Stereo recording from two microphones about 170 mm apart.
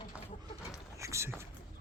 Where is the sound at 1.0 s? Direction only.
15° right (ahead or behind).